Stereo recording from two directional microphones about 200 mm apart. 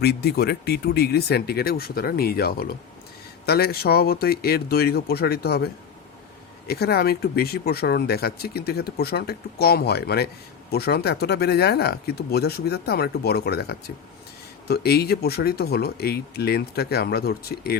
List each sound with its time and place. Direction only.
0.0 s speech: 50° left (ahead or behind)